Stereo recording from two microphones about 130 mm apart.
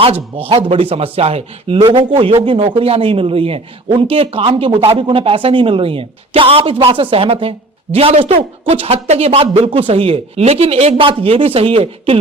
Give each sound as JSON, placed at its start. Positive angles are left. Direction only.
{"t": 0.0, "sound": "speech", "side_deg": -45}